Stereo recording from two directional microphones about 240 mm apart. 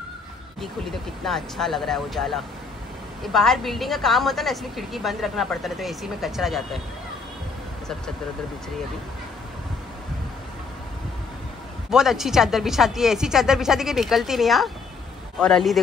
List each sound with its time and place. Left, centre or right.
1.2 s a woman's voice: centre
11.9 s a woman's voice: centre